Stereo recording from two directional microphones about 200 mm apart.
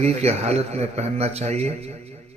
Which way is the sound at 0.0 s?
30° right (ahead or behind).